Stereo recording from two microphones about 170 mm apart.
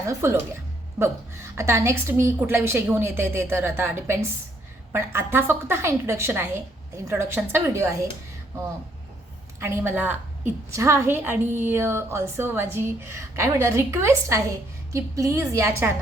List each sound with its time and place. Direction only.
0.0 s a woman's voice: 15° right (ahead or behind)
9.6 s a woman's voice: 15° right (ahead or behind)